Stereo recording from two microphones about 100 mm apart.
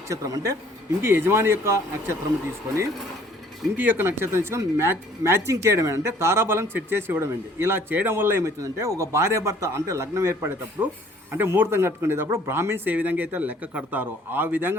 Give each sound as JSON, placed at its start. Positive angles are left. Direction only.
{"t": 0.1, "sound": "speech", "side_deg": -35}
{"t": 1.0, "sound": "speech", "side_deg": -25}
{"t": 3.8, "sound": "speech", "side_deg": -20}